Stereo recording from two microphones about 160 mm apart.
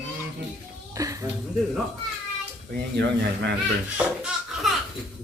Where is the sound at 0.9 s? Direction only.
20° right (ahead or behind).